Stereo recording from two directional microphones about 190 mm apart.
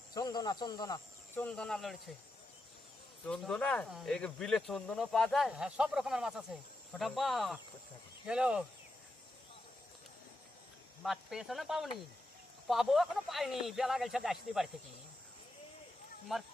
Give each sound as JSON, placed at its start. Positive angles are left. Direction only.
{"t": 0.1, "sound": "speech", "side_deg": 20}
{"t": 1.4, "sound": "speech", "side_deg": 5}
{"t": 3.2, "sound": "speech", "side_deg": 5}
{"t": 11.0, "sound": "speech", "side_deg": 0}
{"t": 16.3, "sound": "speech", "side_deg": 0}